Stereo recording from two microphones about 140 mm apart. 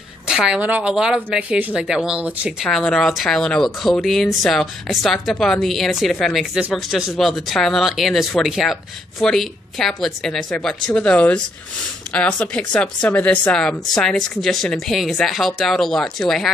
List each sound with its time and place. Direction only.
0.3 s a woman's voice: 5° right (ahead or behind)